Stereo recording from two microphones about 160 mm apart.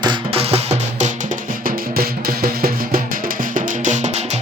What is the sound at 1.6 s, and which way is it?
Music, 65° right (ahead or behind).